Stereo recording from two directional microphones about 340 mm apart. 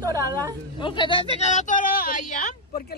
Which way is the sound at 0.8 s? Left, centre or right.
Centre.